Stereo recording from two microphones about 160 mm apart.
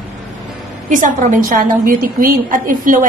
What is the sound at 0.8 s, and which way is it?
A woman's voice, 55° right (ahead or behind).